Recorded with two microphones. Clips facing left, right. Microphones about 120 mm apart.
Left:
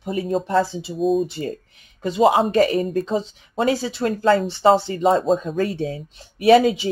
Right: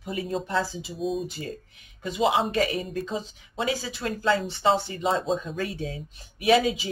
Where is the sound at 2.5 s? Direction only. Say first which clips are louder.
Left 8 dB; 40° left (ahead or behind).